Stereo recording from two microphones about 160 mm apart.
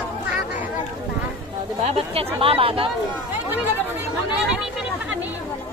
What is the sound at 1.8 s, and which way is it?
Speech, 40° right (ahead or behind).